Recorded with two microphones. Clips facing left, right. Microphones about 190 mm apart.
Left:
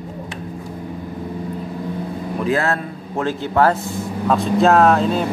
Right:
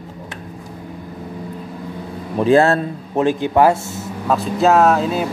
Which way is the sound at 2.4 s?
30° right (ahead or behind).